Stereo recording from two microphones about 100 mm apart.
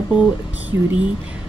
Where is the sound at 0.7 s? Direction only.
30° right (ahead or behind).